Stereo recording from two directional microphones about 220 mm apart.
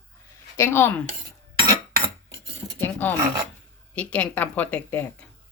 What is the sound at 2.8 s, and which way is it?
Speech, 10° left (ahead or behind).